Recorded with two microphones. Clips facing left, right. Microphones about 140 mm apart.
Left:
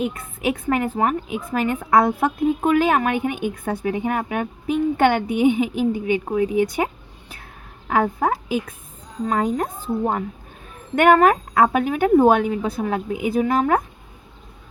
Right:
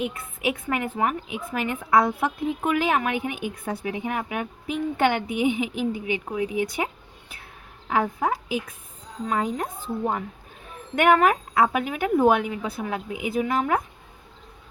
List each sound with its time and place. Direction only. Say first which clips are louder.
0.0 s a woman's voice: left 4 dB; 40° left (ahead or behind)
10.9 s a woman's voice: left 4 dB; 50° left (ahead or behind)